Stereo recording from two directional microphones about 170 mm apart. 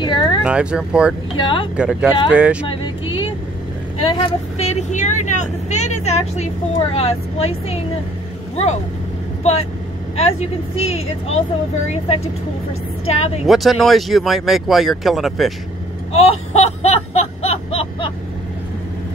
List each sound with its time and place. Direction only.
0.0 s a sound: 25° left (ahead or behind)
0.4 s speech: 5° right (ahead or behind)
1.3 s speech: 30° left (ahead or behind)
1.8 s speech: 5° right (ahead or behind)
2.7 s vehicle: 30° left (ahead or behind)
4.0 s speech: 30° left (ahead or behind)
10.1 s speech: 40° left (ahead or behind)
13.5 s speech: centre (ahead or behind)
16.1 s a sound: 40° left (ahead or behind)